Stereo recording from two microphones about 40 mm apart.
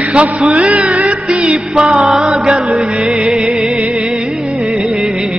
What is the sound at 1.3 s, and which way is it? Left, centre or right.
Music, right.